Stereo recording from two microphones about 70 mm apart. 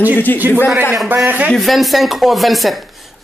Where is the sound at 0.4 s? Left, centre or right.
Right.